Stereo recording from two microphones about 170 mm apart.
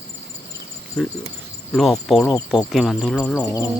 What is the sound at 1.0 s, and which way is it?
Speech, 5° left (ahead or behind).